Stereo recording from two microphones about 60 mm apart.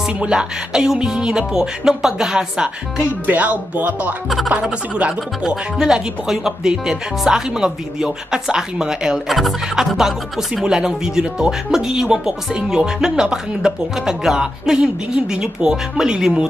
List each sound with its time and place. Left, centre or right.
0.0 s speech: centre
3.1 s speech: right